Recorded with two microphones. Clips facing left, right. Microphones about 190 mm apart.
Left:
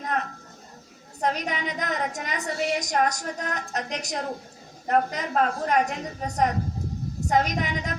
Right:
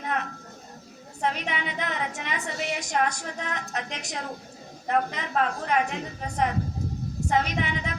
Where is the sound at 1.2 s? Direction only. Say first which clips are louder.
Left 2 dB; 40° left (ahead or behind).